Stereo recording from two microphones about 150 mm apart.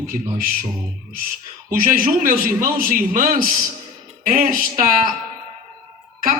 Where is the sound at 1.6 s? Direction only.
70° right (ahead or behind).